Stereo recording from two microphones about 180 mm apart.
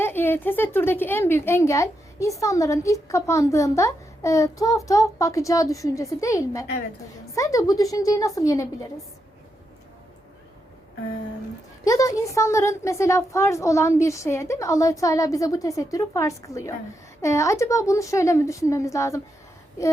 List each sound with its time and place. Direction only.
0.0 s a woman's voice: 10° left (ahead or behind)
11.9 s speech: 20° left (ahead or behind)